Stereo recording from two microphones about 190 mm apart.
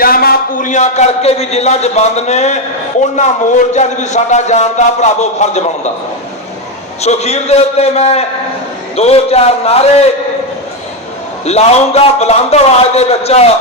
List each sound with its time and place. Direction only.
0.0 s a man's voice: 50° left (ahead or behind)
7.0 s a man's voice: 35° left (ahead or behind)
11.4 s a man's voice: 35° left (ahead or behind)